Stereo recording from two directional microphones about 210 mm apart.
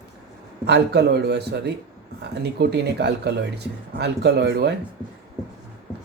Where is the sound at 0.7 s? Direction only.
50° right (ahead or behind).